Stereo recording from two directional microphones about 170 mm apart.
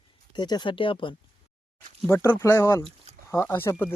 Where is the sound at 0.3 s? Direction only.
25° left (ahead or behind).